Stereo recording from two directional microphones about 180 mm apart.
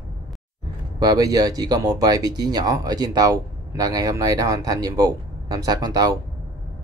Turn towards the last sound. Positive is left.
turn(degrees=-20)  # may be behind; listen again after turning